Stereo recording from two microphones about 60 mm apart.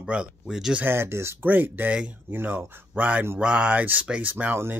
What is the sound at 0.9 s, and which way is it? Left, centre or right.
Speech, right.